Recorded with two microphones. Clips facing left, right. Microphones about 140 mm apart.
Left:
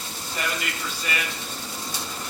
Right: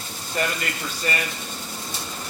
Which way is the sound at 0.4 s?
45° right (ahead or behind).